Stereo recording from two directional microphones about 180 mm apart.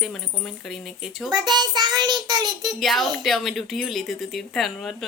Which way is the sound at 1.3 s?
25° right (ahead or behind).